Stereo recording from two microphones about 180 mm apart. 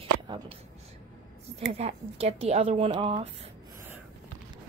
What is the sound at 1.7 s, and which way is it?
Speech, 35° right (ahead or behind).